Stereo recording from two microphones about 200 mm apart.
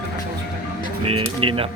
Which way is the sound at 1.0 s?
25° right (ahead or behind).